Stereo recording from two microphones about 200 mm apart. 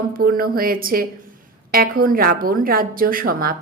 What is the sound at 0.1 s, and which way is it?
A woman's voice, 45° right (ahead or behind).